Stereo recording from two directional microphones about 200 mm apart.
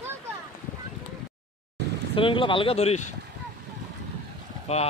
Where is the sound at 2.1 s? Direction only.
25° left (ahead or behind).